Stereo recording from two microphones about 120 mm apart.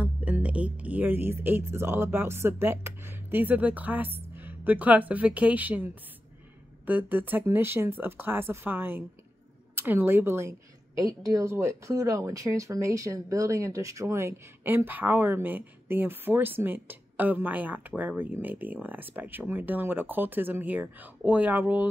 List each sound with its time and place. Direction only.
0.0 s speech: 10° right (ahead or behind)
6.9 s speech: 15° right (ahead or behind)